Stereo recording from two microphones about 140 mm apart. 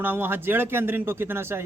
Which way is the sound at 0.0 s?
15° right (ahead or behind).